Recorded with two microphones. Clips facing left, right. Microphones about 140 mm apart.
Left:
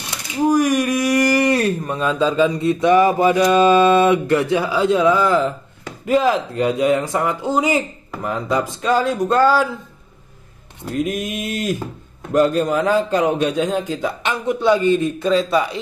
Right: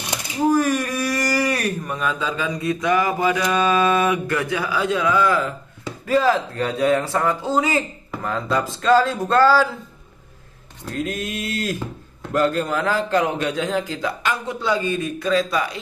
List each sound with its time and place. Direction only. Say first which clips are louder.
0.5 s speech: left 3 dB; 15° left (ahead or behind)
10.9 s speech: left 4 dB; 15° left (ahead or behind)